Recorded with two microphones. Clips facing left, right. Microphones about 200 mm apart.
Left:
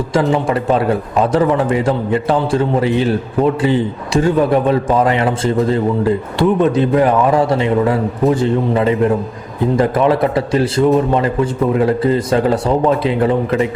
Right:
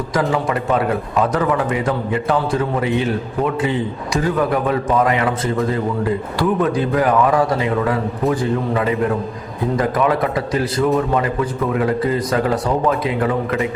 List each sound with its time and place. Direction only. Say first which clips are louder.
0.1 s a man's voice: left 4 dB; 25° left (ahead or behind)